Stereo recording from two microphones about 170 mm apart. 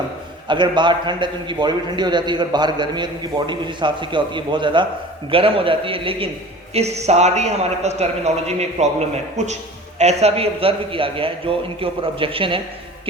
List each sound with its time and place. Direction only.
0.4 s a man's voice: 25° right (ahead or behind)